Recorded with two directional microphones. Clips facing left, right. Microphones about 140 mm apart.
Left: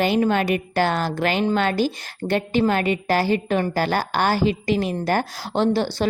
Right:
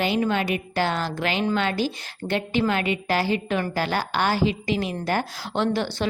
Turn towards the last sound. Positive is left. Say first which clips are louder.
# left 4 dB
turn(degrees=35)  # may be behind; listen again after turning